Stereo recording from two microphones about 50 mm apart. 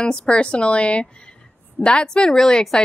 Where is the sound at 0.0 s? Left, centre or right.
Centre.